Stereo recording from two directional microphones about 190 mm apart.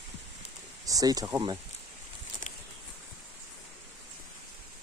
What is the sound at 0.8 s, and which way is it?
Speech, 20° right (ahead or behind).